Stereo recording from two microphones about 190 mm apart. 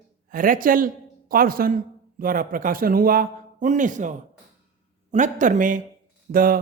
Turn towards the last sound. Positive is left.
turn(degrees=-50)  # may be behind; listen again after turning